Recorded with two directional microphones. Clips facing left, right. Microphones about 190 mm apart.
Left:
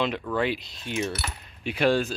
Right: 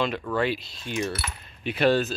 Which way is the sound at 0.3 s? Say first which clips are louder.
Right 1 dB; 15° left (ahead or behind).